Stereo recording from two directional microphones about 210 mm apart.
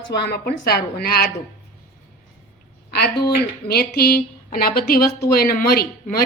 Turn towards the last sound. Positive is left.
turn(degrees=45)  # may be behind; listen again after turning